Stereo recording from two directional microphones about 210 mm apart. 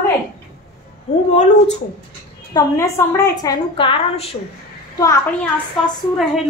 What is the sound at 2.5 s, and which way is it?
A woman's voice, 15° left (ahead or behind).